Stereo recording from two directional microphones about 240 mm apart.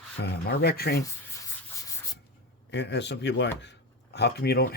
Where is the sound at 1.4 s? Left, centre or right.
Centre.